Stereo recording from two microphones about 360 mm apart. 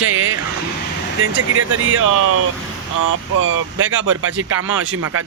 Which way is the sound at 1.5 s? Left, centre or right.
Right.